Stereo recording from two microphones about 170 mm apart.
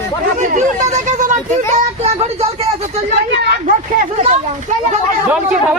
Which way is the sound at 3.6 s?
45° right (ahead or behind).